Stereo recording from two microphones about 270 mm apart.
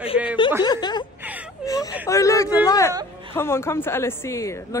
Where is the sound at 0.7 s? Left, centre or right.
Centre.